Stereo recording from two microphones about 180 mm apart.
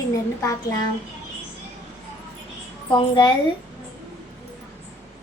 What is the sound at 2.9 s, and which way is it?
Speech, 25° left (ahead or behind).